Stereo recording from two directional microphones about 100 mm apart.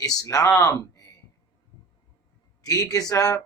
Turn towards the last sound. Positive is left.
turn(degrees=35)  # may be behind; listen again after turning